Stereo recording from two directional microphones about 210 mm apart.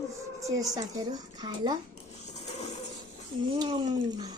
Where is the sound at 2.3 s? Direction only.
30° left (ahead or behind).